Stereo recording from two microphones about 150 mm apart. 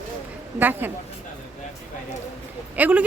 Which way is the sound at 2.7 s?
10° right (ahead or behind).